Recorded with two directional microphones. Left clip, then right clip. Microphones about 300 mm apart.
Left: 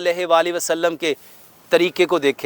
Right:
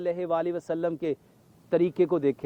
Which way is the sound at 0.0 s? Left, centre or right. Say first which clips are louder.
Left 11 dB; centre.